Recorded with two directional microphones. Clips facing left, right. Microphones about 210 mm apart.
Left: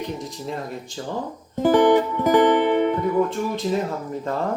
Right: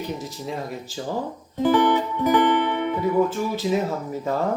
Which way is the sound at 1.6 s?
45° left (ahead or behind).